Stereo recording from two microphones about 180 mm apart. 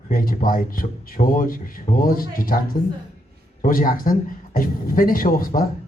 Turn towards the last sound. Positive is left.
turn(degrees=50)  # may be behind; listen again after turning